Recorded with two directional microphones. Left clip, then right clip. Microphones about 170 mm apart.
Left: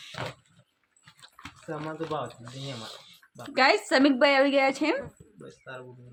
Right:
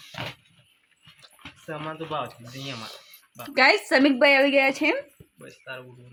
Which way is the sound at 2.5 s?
10° right (ahead or behind).